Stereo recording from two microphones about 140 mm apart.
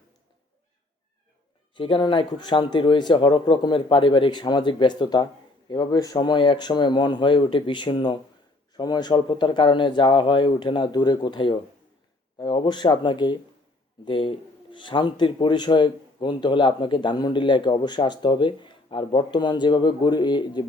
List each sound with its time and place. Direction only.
1.7 s speech: 35° left (ahead or behind)